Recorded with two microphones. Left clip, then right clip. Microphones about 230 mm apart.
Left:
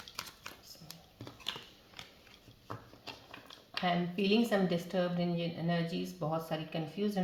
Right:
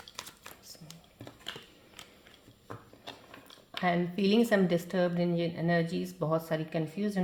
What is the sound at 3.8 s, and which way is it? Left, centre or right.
Speech, right.